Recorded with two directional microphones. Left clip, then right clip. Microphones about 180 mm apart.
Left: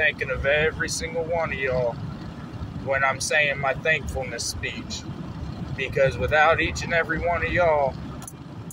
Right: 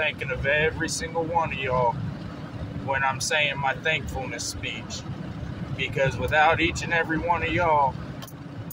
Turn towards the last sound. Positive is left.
turn(degrees=-20)  # may be behind; listen again after turning